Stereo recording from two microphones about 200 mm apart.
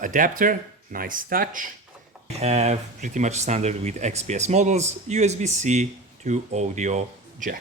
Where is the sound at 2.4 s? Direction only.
35° right (ahead or behind).